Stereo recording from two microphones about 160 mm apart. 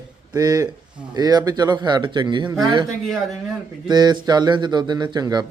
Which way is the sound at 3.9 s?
25° right (ahead or behind).